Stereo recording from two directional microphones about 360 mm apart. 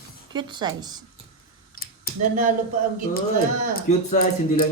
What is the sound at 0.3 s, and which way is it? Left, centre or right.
Speech, centre.